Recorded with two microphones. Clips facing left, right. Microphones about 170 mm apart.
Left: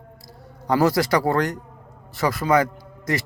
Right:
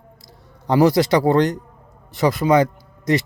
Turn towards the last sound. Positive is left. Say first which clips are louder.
# right 6 dB
turn(degrees=-20)  # may be behind; listen again after turning